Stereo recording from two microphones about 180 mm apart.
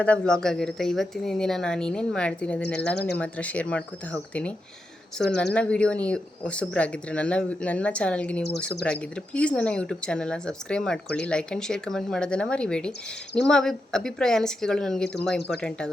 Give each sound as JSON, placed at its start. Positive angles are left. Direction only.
{"t": 0.0, "sound": "speech", "side_deg": 5}
{"t": 2.9, "sound": "speech", "side_deg": 65}
{"t": 3.2, "sound": "speech", "side_deg": 5}